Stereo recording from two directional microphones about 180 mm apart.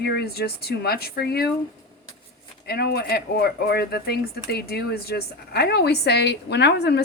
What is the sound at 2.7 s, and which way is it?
A woman's voice, 60° left (ahead or behind).